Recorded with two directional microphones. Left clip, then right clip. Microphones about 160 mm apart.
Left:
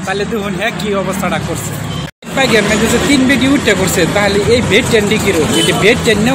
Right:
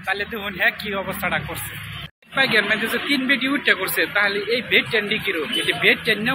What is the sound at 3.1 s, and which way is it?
Speech, 20° left (ahead or behind).